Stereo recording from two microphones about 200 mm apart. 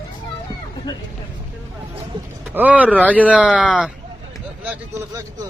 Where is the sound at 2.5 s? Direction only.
5° right (ahead or behind).